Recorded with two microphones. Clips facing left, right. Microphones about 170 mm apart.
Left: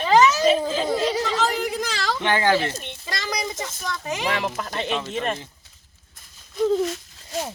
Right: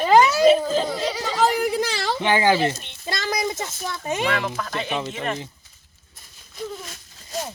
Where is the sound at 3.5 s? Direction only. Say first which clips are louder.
Even; 25° right (ahead or behind).